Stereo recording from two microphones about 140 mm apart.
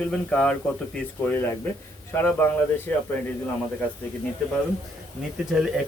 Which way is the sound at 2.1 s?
15° left (ahead or behind).